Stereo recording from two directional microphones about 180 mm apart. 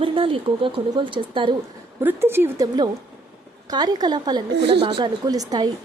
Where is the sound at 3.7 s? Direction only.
20° right (ahead or behind).